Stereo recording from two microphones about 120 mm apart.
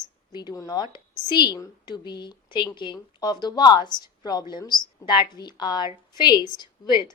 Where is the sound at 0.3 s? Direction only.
30° left (ahead or behind).